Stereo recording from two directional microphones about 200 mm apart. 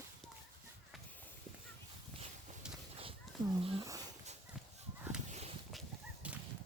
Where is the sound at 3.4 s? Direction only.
25° right (ahead or behind).